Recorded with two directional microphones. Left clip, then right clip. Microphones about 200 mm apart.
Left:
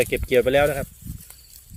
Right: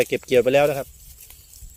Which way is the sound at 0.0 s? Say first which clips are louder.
Right 1 dB; 20° right (ahead or behind).